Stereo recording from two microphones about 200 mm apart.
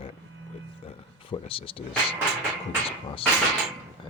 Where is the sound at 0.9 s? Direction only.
25° left (ahead or behind).